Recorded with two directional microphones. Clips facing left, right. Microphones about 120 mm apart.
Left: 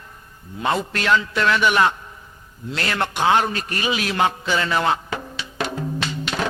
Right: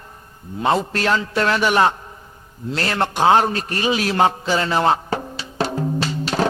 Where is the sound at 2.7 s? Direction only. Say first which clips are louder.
Right 3 dB; 35° right (ahead or behind).